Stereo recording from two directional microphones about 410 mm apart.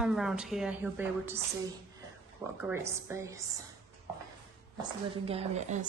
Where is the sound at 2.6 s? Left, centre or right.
Centre.